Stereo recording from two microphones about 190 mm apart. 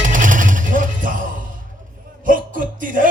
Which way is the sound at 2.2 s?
45° right (ahead or behind).